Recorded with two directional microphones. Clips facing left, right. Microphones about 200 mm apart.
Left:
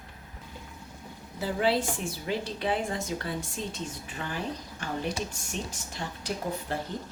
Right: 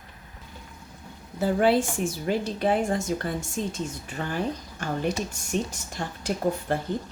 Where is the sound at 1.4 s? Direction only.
50° right (ahead or behind).